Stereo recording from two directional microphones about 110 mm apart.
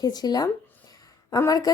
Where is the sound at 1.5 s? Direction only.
35° left (ahead or behind).